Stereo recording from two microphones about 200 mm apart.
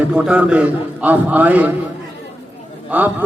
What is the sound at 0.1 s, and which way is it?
A man's voice, 5° right (ahead or behind).